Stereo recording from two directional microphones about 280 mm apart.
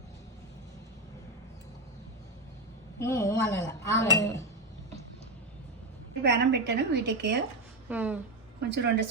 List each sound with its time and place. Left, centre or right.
3.0 s speech: centre
6.2 s a woman's voice: right
7.9 s speech: centre
8.7 s a woman's voice: right